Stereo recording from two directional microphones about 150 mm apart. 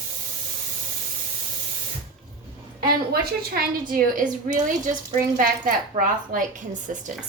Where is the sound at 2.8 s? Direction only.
85° right.